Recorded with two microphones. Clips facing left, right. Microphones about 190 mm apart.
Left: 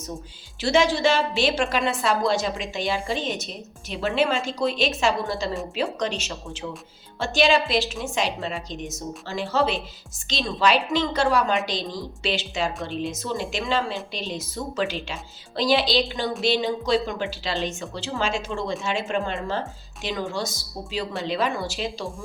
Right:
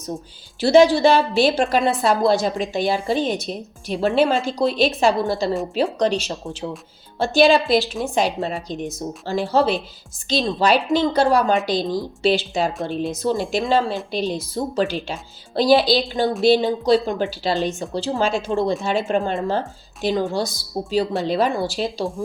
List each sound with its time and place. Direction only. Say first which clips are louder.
0.6 s a woman's voice: right 7 dB; 35° right (ahead or behind)
11.5 s speech: right 5 dB; 5° right (ahead or behind)
11.8 s a woman's voice: right 9 dB; 35° right (ahead or behind)